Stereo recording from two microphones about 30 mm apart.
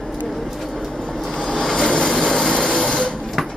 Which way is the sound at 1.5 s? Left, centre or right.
Centre.